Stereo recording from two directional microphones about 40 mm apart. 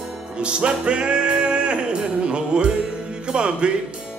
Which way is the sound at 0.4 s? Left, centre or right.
Right.